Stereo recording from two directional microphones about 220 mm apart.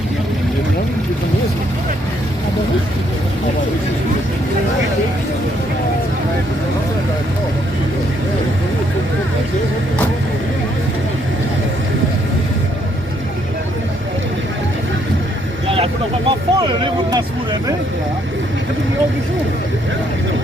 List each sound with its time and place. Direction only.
15.6 s vehicle: 25° right (ahead or behind)
16.3 s speech: 20° right (ahead or behind)